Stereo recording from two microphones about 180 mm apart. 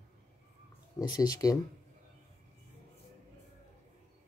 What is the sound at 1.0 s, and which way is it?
Speech, 20° left (ahead or behind).